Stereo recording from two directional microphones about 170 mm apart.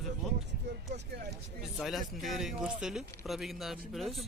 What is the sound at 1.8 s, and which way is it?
Speech, centre (ahead or behind).